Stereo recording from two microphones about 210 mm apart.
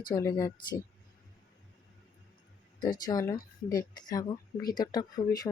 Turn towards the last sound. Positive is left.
turn(degrees=15)  # may be behind; listen again after turning